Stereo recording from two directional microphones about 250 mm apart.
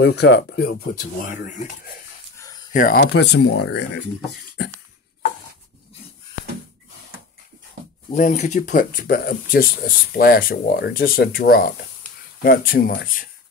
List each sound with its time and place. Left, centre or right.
0.0 s speech: left
1.2 s speech: left
2.3 s dog: centre
2.7 s speech: left
8.1 s speech: left